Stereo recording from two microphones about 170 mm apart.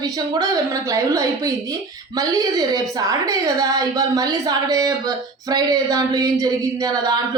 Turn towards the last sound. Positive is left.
turn(degrees=-20)  # may be behind; listen again after turning